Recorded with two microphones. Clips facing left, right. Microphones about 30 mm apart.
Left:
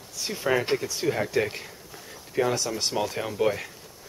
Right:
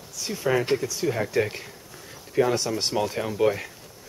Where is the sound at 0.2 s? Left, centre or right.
Centre.